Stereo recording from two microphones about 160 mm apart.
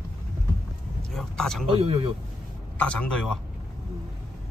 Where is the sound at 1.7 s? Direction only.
35° right (ahead or behind).